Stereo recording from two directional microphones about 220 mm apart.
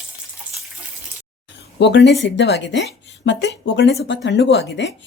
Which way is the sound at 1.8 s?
55° left (ahead or behind).